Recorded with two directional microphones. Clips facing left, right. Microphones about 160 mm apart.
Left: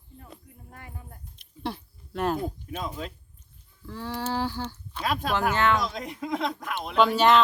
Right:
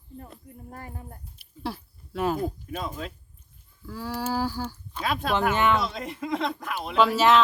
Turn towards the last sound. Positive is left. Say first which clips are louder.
# even
turn(degrees=0)  # may be behind; listen again after turning